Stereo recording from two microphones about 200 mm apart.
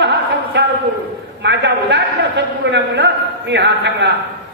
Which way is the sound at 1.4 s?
60° right (ahead or behind).